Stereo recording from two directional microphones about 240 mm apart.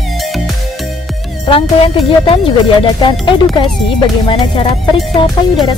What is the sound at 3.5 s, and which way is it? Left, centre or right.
Speech, centre.